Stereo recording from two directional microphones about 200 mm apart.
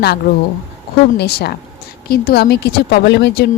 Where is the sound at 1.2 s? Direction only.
55° left (ahead or behind).